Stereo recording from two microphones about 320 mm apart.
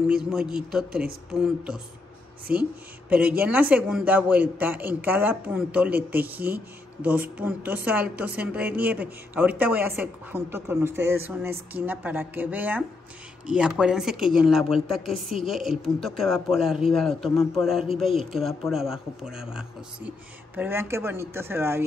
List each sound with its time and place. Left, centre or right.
0.1 s a man's voice: centre
2.5 s speech: right
3.1 s a man's voice: centre